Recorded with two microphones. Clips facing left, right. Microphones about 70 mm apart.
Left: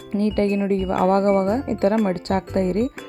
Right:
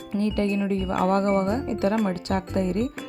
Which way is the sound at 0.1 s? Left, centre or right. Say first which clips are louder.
Left 4 dB; left.